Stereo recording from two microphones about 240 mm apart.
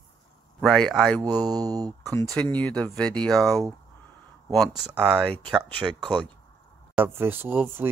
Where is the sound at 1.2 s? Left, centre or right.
Centre.